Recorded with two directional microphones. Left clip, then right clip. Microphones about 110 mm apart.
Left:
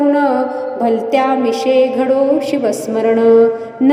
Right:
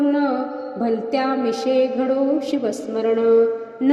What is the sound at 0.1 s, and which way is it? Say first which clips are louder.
Music: left 8 dB; 40° left (ahead or behind).